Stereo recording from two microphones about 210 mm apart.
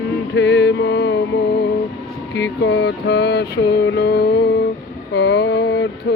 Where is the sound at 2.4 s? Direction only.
55° left (ahead or behind).